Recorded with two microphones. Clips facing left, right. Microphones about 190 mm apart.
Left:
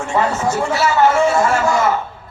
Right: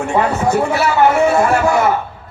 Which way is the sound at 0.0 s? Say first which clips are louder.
Right 2 dB; 60° right (ahead or behind).